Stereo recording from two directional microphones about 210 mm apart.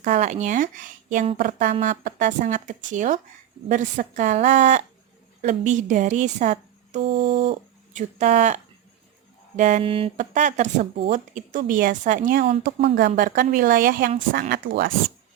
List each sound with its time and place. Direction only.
0.0 s speech: 35° right (ahead or behind)
7.0 s a sound: 55° right (ahead or behind)
7.3 s speech: 25° right (ahead or behind); by 14.9 s 45° right (ahead or behind)